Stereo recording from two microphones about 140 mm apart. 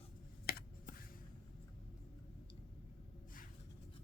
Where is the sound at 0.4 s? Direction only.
90° left.